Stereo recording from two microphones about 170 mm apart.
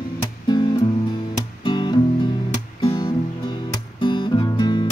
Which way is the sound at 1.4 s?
25° left (ahead or behind).